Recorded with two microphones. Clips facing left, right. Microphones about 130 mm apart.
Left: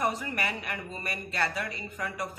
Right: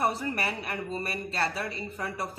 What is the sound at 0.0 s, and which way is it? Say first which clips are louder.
Speech: right 2 dB; 30° right (ahead or behind).